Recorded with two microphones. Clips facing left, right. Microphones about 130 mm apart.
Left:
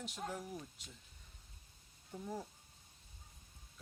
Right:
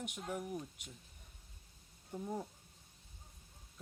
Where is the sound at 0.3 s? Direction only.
15° right (ahead or behind).